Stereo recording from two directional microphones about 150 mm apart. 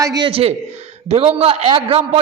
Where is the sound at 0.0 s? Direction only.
25° right (ahead or behind).